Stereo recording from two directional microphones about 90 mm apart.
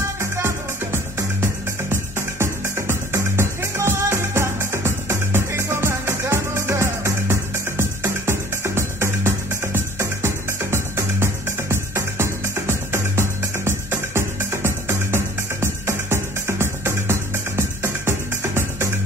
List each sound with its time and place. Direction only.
0.2 s music: 30° right (ahead or behind)